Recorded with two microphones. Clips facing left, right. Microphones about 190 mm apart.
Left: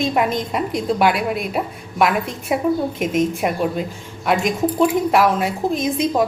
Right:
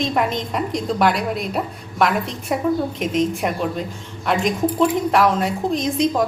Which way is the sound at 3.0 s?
50° left (ahead or behind).